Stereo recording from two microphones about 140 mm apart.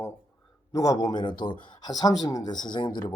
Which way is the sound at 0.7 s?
25° left (ahead or behind).